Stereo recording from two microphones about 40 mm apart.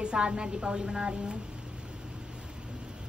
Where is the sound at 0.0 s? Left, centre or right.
Right.